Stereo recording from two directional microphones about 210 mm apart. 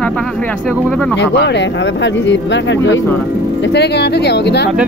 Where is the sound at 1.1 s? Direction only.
55° left (ahead or behind).